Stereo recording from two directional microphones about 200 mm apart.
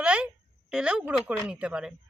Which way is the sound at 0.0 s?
5° right (ahead or behind).